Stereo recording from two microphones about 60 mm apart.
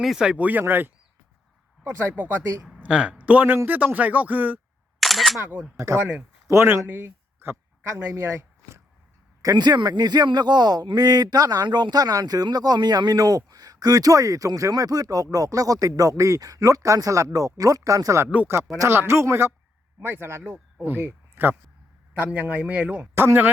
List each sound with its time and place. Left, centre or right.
0.2 s speech: centre
0.7 s speech: right
2.7 s speech: centre
4.9 s single-lens reflex camera: centre
5.9 s speech: right
6.5 s speech: right
6.8 s a sound: right
7.9 s speech: right
9.4 s speech: right
15.9 s speech: right
18.9 s speech: right
21.0 s a sound: right
22.2 s speech: right
23.1 s speech: right